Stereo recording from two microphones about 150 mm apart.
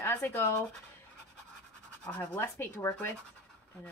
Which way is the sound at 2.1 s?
15° left (ahead or behind).